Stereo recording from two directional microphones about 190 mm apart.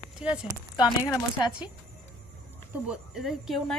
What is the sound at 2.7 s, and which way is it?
Speech, 5° right (ahead or behind).